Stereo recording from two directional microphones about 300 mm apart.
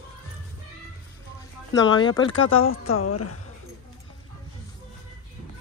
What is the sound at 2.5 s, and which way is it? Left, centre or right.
Speech, left.